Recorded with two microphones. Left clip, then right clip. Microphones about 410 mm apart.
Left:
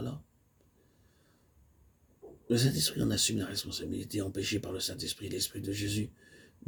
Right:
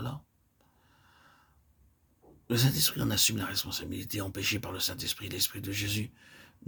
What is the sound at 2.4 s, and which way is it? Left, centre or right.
Speech, right.